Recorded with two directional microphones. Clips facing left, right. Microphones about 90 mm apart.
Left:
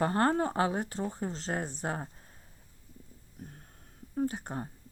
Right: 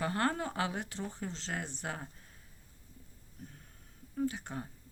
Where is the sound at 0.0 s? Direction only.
35° left (ahead or behind).